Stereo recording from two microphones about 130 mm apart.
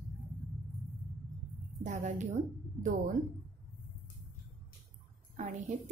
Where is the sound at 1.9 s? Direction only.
75° right (ahead or behind).